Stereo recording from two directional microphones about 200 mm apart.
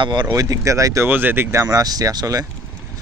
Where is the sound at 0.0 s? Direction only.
20° right (ahead or behind).